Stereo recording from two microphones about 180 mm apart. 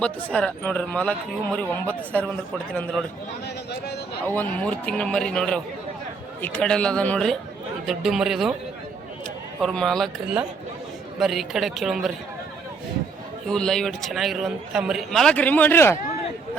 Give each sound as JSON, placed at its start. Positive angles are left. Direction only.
{"t": 0.3, "sound": "speech", "side_deg": 5}
{"t": 3.4, "sound": "speech", "side_deg": 65}
{"t": 4.4, "sound": "a man's voice", "side_deg": 5}
{"t": 9.6, "sound": "a man's voice", "side_deg": 0}
{"t": 11.2, "sound": "a man's voice", "side_deg": 0}
{"t": 13.5, "sound": "a man's voice", "side_deg": 5}